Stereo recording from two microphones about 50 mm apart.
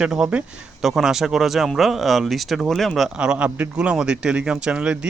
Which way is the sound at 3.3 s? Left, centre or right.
Right.